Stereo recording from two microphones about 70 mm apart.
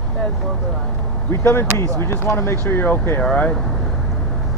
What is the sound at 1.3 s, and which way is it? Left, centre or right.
Speech, left.